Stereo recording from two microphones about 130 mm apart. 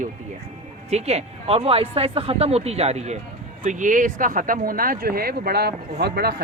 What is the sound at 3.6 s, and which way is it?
Speech, 80° right.